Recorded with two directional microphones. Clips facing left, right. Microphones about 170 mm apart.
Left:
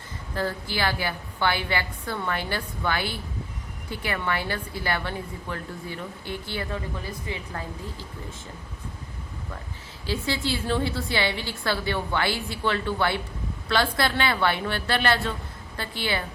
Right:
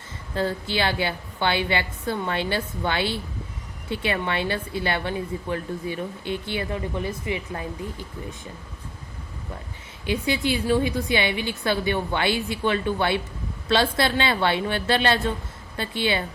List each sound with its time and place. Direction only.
0.3 s a woman's voice: 20° right (ahead or behind)
10.1 s a woman's voice: 20° right (ahead or behind)